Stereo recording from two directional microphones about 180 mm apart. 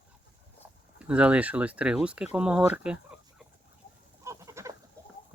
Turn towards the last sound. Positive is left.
turn(degrees=-15)  # may be behind; listen again after turning